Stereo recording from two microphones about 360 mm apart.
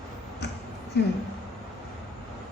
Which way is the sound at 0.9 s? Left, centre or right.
Left.